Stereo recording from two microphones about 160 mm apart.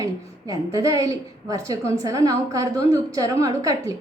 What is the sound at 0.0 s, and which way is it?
A woman's voice, 20° right (ahead or behind).